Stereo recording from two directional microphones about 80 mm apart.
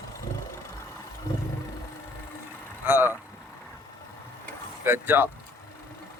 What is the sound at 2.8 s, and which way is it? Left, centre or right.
Speech, right.